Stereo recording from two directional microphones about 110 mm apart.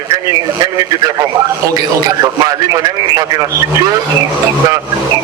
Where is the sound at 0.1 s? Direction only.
30° right (ahead or behind).